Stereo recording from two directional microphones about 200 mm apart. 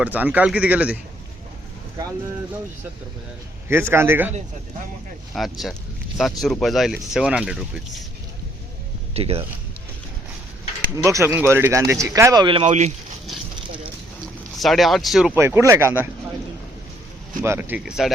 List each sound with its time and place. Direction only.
0.0 s speech: 5° right (ahead or behind)
3.7 s speech: 10° right (ahead or behind)
5.3 s speech: centre (ahead or behind)
9.1 s speech: 30° right (ahead or behind)
10.9 s speech: 15° right (ahead or behind)
12.6 s speech: 35° right (ahead or behind)
14.6 s speech: centre (ahead or behind)
15.4 s speech: 10° right (ahead or behind)
17.4 s speech: 10° right (ahead or behind)